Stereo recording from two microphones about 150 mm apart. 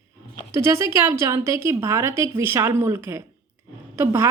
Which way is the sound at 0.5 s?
20° right (ahead or behind).